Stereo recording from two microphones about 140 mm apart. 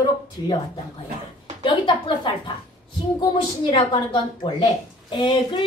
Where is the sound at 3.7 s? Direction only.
35° left (ahead or behind).